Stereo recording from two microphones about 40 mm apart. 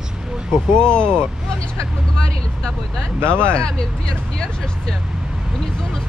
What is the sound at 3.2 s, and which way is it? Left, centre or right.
Speech, right.